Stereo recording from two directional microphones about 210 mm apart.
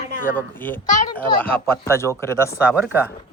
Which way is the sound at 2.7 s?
10° right (ahead or behind).